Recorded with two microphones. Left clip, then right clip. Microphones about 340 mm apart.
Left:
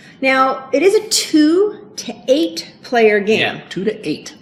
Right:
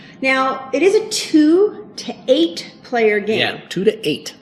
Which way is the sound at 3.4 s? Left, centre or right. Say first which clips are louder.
Right 2 dB; right.